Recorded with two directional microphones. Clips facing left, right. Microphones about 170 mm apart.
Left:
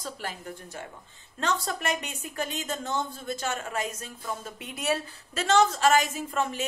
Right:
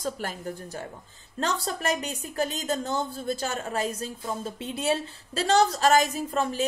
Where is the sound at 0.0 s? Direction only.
45° right (ahead or behind).